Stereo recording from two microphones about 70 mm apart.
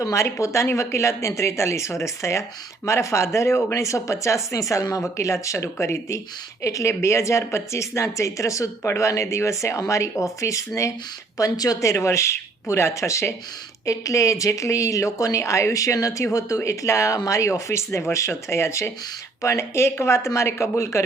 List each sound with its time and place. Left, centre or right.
0.0 s speech: left